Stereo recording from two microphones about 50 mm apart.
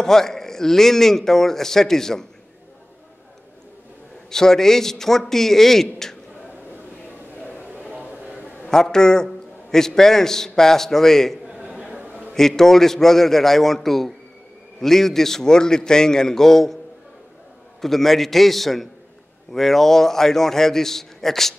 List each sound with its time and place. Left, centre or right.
0.0 s a man's voice: centre
4.3 s a man's voice: centre
7.9 s a sound: right
8.6 s a man's voice: centre
11.4 s a sound: right
12.4 s a man's voice: centre
17.8 s a man's voice: centre